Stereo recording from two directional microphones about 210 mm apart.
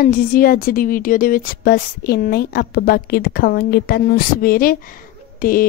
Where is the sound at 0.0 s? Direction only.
45° left (ahead or behind).